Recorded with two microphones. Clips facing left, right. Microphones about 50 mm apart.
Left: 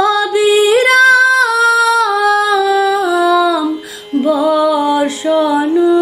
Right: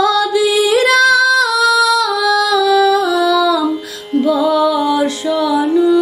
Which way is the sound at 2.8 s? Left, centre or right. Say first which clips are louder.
Even; centre.